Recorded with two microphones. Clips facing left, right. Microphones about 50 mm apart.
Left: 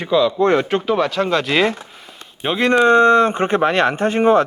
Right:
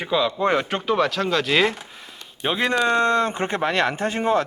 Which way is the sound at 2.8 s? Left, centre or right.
Left.